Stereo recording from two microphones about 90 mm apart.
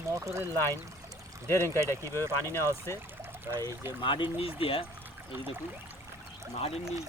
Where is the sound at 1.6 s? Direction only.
35° right (ahead or behind).